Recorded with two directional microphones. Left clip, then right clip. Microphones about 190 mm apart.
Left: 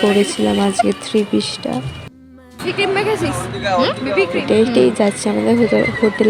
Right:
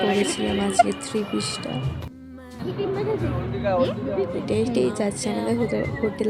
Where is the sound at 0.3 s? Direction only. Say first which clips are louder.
Left 8 dB; 15° left (ahead or behind).